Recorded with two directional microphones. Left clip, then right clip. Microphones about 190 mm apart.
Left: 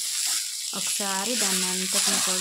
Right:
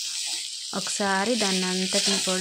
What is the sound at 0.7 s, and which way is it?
Speech, 30° right (ahead or behind).